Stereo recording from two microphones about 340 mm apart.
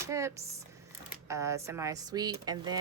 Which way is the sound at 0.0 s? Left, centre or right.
Centre.